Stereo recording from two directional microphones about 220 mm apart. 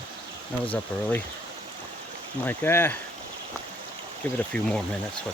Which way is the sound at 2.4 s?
10° left (ahead or behind).